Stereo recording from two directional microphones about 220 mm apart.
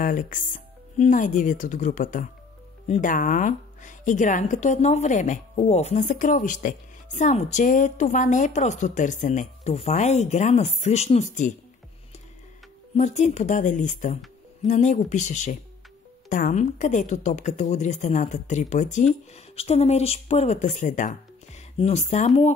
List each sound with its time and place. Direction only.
0.0 s speech: 40° left (ahead or behind)
12.9 s speech: 35° left (ahead or behind)